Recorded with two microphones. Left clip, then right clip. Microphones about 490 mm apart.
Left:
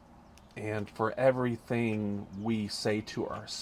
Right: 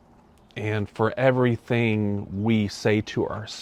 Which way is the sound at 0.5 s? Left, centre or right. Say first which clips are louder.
Right 7 dB; right.